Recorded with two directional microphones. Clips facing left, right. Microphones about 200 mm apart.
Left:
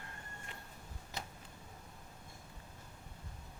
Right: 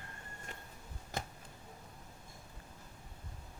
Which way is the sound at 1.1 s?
50° right (ahead or behind).